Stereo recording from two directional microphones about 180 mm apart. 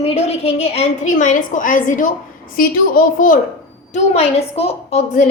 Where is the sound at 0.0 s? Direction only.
35° left (ahead or behind).